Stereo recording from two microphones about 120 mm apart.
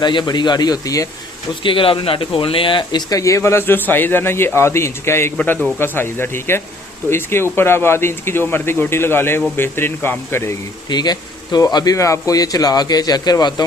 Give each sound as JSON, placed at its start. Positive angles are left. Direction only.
{"t": 0.0, "sound": "speech", "side_deg": 40}
{"t": 1.6, "sound": "speech", "side_deg": 45}
{"t": 3.2, "sound": "a man's voice", "side_deg": 25}
{"t": 10.8, "sound": "speech", "side_deg": 35}